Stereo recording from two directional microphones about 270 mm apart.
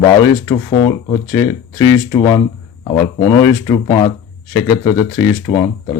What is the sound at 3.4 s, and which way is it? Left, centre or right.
Speech, centre.